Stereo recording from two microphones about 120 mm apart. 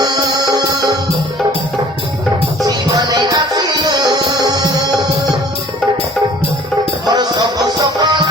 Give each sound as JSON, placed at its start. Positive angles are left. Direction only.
{"t": 0.0, "sound": "music", "side_deg": -30}
{"t": 2.6, "sound": "music", "side_deg": -30}
{"t": 7.1, "sound": "music", "side_deg": -35}